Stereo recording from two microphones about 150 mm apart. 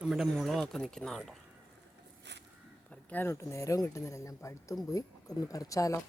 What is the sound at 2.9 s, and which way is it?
Speech, 10° left (ahead or behind).